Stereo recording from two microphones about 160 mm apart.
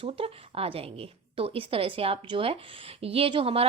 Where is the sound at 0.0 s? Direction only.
35° right (ahead or behind).